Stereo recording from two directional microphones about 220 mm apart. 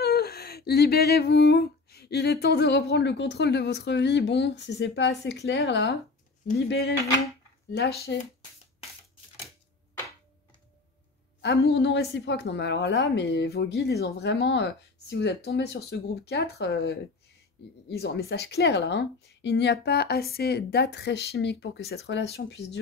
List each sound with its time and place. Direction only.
0.0 s humming: 45° left (ahead or behind)
8.1 s humming: 50° left (ahead or behind)
11.4 s humming: 50° left (ahead or behind)